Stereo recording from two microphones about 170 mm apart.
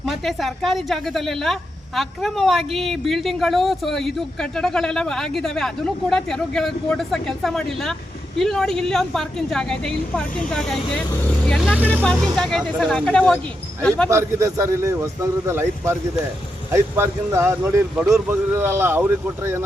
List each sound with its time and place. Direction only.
0.0 s speech: centre (ahead or behind)
14.1 s speech: 15° right (ahead or behind)